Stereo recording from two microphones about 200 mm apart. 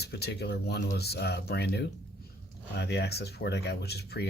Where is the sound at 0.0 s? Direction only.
55° left (ahead or behind).